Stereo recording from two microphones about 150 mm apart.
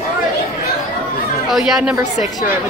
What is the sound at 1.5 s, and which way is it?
Speech, centre (ahead or behind).